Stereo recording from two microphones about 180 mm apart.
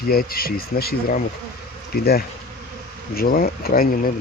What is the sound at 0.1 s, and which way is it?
Speech, 55° left (ahead or behind).